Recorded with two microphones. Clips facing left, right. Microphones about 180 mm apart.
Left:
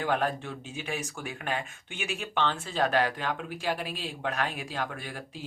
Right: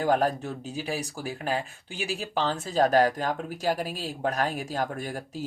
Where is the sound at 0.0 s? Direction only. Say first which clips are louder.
Right 4 dB; 40° right (ahead or behind).